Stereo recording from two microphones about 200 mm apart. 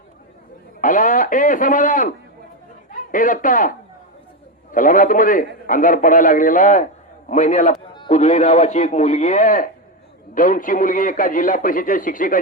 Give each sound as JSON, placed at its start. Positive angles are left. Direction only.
{"t": 0.8, "sound": "a man's voice", "side_deg": 40}